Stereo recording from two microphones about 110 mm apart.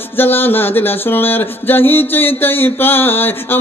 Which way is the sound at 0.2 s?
20° left (ahead or behind).